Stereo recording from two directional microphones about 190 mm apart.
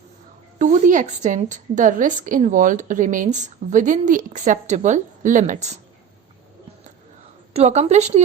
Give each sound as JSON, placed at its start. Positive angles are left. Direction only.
{"t": 0.6, "sound": "a woman's voice", "side_deg": -40}
{"t": 7.5, "sound": "a woman's voice", "side_deg": -35}